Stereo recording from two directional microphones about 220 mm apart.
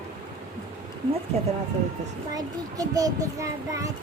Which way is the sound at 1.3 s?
30° right (ahead or behind).